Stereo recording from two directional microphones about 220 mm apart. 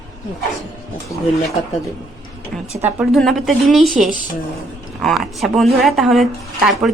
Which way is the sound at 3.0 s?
Centre (ahead or behind).